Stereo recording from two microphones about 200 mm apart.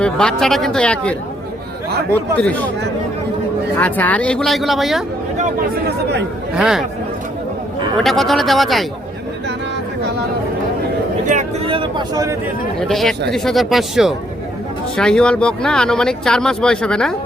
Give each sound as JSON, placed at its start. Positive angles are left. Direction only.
{"t": 0.0, "sound": "speech", "side_deg": 5}
{"t": 2.1, "sound": "speech", "side_deg": 5}
{"t": 3.8, "sound": "speech", "side_deg": 10}
{"t": 5.4, "sound": "speech", "side_deg": -50}
{"t": 6.6, "sound": "speech", "side_deg": -5}
{"t": 8.0, "sound": "speech", "side_deg": 0}
{"t": 11.3, "sound": "speech", "side_deg": -30}
{"t": 12.9, "sound": "speech", "side_deg": 0}